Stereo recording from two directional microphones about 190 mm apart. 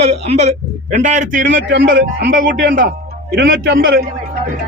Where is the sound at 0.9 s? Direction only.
40° right (ahead or behind).